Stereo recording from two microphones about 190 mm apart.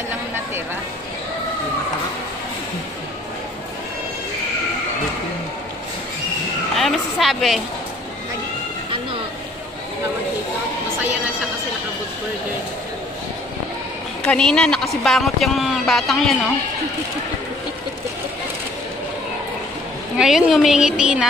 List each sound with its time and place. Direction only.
6.8 s a sound: centre (ahead or behind)
14.2 s speech: 5° left (ahead or behind)
20.2 s speech: centre (ahead or behind)